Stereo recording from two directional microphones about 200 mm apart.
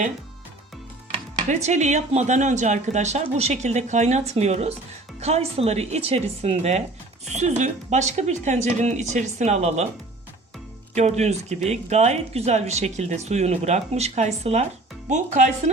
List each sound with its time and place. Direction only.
1.1 s speech: 35° right (ahead or behind)
10.9 s speech: 35° right (ahead or behind)